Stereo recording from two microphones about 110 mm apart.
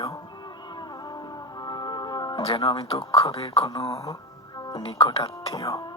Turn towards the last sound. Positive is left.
turn(degrees=55)  # may be behind; listen again after turning